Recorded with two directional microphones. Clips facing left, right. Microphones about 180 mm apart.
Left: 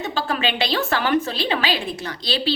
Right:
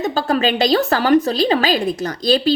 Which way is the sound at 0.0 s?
40° right (ahead or behind).